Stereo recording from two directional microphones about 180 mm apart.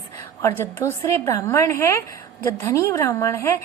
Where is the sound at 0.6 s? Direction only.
15° left (ahead or behind).